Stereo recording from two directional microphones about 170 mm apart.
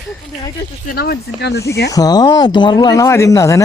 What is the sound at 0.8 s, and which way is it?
Speech, 65° left (ahead or behind).